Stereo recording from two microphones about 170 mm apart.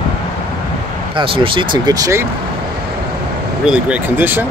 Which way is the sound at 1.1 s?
30° right (ahead or behind).